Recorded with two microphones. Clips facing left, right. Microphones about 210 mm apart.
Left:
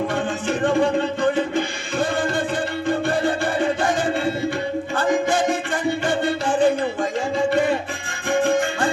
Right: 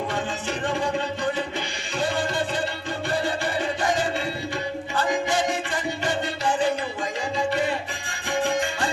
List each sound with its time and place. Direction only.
3.1 s music: 50° left (ahead or behind)
4.9 s music: 50° left (ahead or behind)